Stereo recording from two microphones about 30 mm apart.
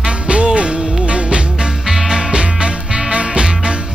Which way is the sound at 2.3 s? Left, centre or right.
Right.